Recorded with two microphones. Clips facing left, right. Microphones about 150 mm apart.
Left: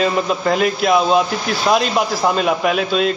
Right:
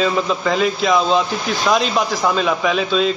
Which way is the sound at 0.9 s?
5° left (ahead or behind).